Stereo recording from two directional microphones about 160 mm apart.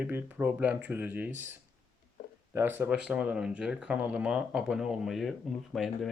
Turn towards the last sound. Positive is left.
turn(degrees=0)  # may be behind; listen again after turning